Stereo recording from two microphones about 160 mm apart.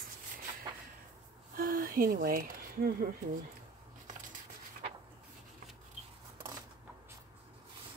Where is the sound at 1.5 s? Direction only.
65° right (ahead or behind).